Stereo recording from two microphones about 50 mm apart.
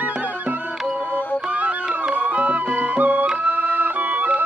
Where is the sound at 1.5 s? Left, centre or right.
Right.